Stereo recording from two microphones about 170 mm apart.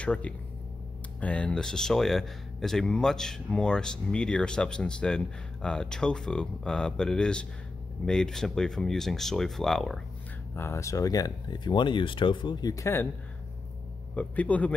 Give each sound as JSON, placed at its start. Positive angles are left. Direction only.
{"t": 0.0, "sound": "speech", "side_deg": 5}
{"t": 10.5, "sound": "speech", "side_deg": 15}
{"t": 14.1, "sound": "speech", "side_deg": 10}